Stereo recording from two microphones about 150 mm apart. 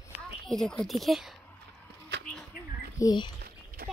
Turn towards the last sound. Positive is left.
turn(degrees=25)  # may be behind; listen again after turning